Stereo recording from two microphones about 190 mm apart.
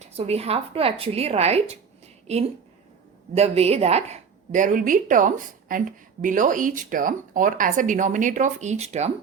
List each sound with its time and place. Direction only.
0.0 s a woman's voice: 30° right (ahead or behind)